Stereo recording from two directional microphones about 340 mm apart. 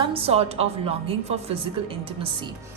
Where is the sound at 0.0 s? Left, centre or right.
Centre.